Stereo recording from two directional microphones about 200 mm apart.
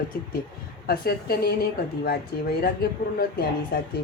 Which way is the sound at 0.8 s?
50° left (ahead or behind).